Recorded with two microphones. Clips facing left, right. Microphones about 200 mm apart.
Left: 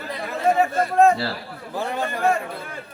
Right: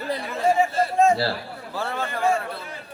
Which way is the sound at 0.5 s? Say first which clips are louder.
Left 1 dB; 65° left (ahead or behind).